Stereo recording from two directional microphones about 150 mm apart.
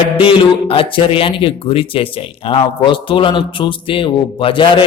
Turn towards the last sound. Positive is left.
turn(degrees=35)  # may be behind; listen again after turning